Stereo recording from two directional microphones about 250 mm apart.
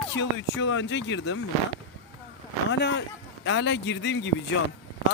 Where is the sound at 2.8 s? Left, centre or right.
Left.